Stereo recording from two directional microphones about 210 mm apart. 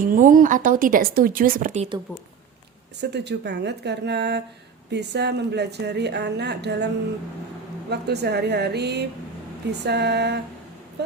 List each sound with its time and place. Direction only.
0.0 s speech: 40° right (ahead or behind)
3.0 s a woman's voice: 55° right (ahead or behind)